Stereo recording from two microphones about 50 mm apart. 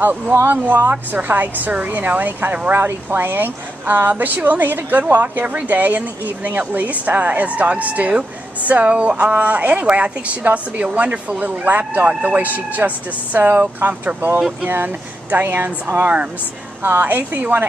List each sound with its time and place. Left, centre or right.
0.5 s a woman's voice: right